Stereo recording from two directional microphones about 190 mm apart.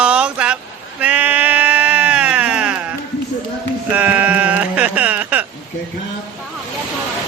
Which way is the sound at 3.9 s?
10° right (ahead or behind).